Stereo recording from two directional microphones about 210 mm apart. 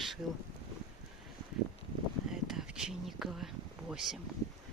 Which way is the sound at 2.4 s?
5° right (ahead or behind).